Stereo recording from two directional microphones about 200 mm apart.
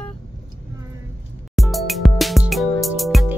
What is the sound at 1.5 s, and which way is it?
Music, centre (ahead or behind).